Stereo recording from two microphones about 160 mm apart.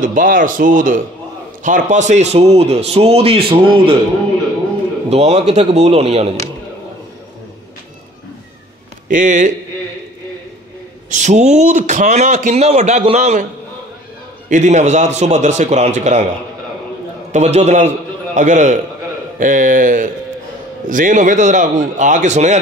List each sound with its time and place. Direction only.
0.0 s a man's voice: 55° right (ahead or behind); by 4.0 s 35° right (ahead or behind)
5.1 s a man's voice: 40° right (ahead or behind)
9.1 s a man's voice: 50° right (ahead or behind)
11.1 s a man's voice: 45° right (ahead or behind)
14.5 s a man's voice: 45° right (ahead or behind)
17.3 s a man's voice: 45° right (ahead or behind)